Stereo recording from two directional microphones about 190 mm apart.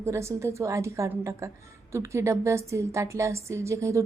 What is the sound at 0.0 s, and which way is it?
A woman's voice, 15° right (ahead or behind).